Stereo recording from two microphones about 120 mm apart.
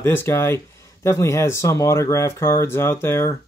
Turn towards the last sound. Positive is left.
turn(degrees=20)  # may be behind; listen again after turning